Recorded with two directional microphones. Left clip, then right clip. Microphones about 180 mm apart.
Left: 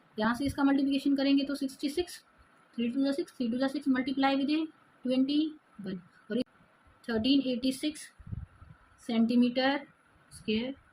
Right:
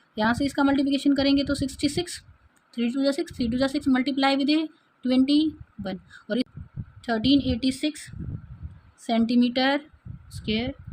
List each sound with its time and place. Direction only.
0.2 s a woman's voice: 60° right (ahead or behind)
9.0 s a woman's voice: 60° right (ahead or behind)